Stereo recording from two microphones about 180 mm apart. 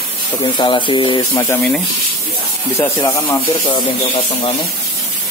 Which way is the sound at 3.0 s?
15° left (ahead or behind).